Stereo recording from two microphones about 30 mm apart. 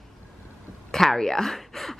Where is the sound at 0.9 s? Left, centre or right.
Centre.